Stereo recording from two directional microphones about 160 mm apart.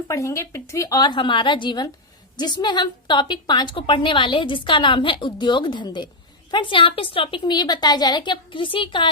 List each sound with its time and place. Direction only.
0.1 s a woman's voice: 20° left (ahead or behind)